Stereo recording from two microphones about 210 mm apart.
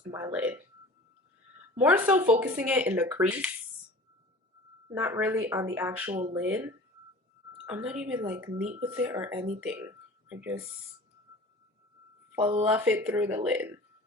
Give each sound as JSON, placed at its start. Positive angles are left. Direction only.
{"t": 0.1, "sound": "speech", "side_deg": -10}
{"t": 1.8, "sound": "speech", "side_deg": -10}
{"t": 4.9, "sound": "speech", "side_deg": -10}
{"t": 7.7, "sound": "speech", "side_deg": -5}
{"t": 12.4, "sound": "speech", "side_deg": -25}
{"t": 12.6, "sound": "speech", "side_deg": -5}